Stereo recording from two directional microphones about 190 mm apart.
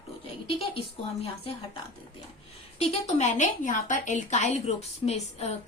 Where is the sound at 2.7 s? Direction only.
35° left (ahead or behind).